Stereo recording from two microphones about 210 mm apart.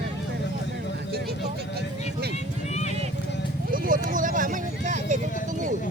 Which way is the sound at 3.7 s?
40° right (ahead or behind).